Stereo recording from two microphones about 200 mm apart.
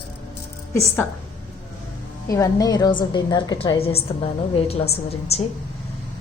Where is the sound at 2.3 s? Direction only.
15° left (ahead or behind).